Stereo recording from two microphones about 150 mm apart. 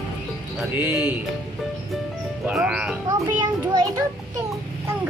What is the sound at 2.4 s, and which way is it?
Speech, 10° right (ahead or behind).